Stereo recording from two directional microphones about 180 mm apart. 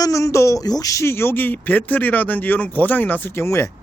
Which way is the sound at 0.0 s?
15° left (ahead or behind).